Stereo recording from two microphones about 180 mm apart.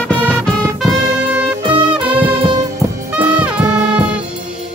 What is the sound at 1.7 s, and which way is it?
Music, 30° right (ahead or behind).